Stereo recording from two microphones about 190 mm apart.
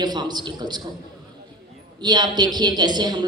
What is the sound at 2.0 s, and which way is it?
A woman's voice, 20° right (ahead or behind).